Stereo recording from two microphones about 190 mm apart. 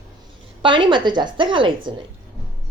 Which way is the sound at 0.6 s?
25° right (ahead or behind).